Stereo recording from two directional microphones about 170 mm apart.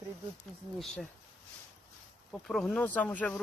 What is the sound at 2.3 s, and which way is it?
Speech, centre (ahead or behind).